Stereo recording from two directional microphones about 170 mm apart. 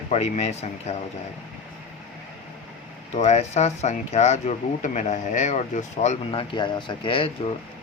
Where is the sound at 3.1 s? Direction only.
40° left (ahead or behind).